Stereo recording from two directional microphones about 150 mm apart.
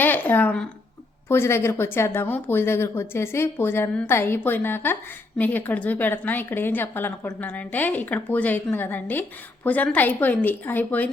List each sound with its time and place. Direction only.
0.0 s a woman's voice: 10° left (ahead or behind)